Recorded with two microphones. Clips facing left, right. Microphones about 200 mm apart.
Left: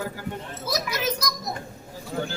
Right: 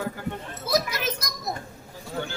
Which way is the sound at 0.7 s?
50° right (ahead or behind).